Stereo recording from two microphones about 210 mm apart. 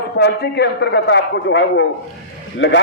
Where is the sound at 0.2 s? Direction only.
55° left (ahead or behind).